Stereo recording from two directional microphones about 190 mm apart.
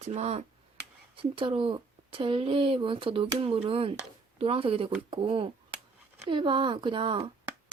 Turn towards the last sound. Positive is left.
turn(degrees=-25)  # may be behind; listen again after turning